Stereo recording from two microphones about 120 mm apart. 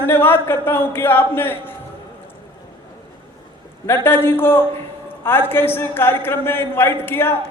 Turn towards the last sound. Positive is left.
turn(degrees=20)  # may be behind; listen again after turning